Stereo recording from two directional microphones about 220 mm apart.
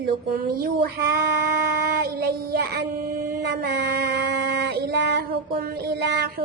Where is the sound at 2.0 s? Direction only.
45° right (ahead or behind).